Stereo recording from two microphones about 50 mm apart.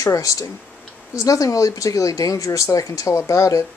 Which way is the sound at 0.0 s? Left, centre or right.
Left.